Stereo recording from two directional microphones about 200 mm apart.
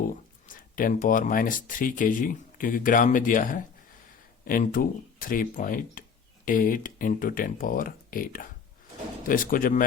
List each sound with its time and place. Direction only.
0.1 s speech: 40° left (ahead or behind)